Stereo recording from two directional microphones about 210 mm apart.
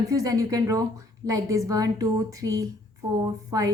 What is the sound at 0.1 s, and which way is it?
A woman's voice, 15° right (ahead or behind).